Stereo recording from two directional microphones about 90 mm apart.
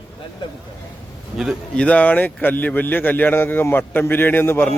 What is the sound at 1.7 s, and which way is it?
A man's voice, 15° left (ahead or behind).